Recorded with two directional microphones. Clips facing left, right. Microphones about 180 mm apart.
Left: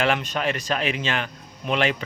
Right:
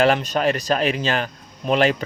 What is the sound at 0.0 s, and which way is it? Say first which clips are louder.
Speech: right 5 dB; 40° right (ahead or behind).